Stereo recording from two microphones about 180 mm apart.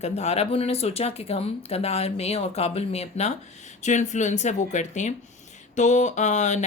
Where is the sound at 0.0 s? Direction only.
35° left (ahead or behind).